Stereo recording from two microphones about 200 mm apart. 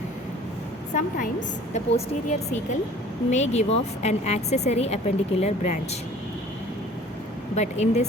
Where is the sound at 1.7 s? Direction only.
35° left (ahead or behind).